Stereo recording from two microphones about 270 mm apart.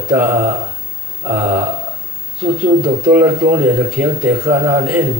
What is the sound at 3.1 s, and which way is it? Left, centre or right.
Speech, centre.